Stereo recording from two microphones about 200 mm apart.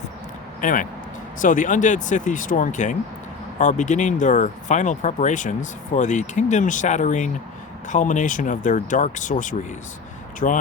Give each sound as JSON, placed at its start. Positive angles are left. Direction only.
{"t": 0.6, "sound": "speech", "side_deg": 40}